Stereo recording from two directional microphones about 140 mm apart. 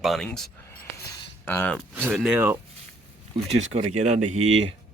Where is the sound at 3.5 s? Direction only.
50° right (ahead or behind).